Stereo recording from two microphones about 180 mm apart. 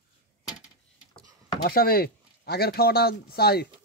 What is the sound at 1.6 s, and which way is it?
Speech, 55° left (ahead or behind).